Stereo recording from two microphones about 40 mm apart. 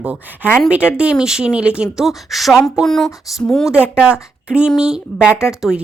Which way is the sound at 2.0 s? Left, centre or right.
Centre.